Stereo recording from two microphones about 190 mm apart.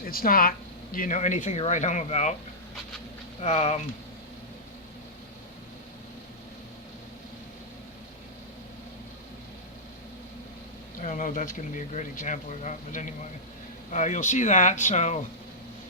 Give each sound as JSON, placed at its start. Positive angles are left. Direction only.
{"t": 0.0, "sound": "speech", "side_deg": 50}
{"t": 3.4, "sound": "speech", "side_deg": 35}
{"t": 11.0, "sound": "speech", "side_deg": 40}